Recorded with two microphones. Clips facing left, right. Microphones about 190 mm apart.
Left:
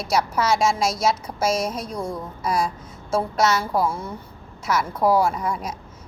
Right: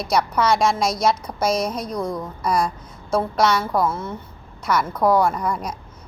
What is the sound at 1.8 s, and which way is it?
Speech, 25° left (ahead or behind).